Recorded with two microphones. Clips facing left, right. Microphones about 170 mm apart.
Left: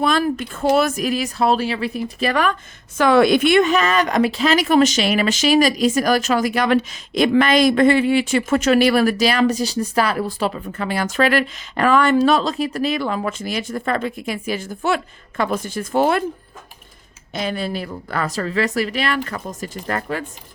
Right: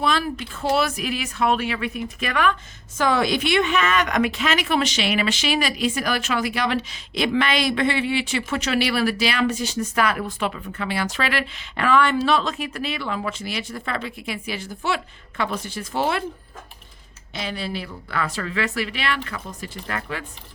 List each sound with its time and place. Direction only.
0.0 s speech: 45° left (ahead or behind)
3.0 s a woman's voice: 60° left (ahead or behind)
17.3 s a woman's voice: 45° left (ahead or behind)